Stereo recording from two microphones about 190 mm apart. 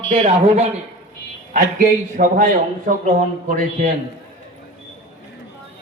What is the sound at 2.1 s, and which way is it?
Speech, 45° right (ahead or behind).